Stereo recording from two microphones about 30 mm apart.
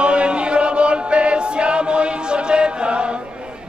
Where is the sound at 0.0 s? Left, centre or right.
Right.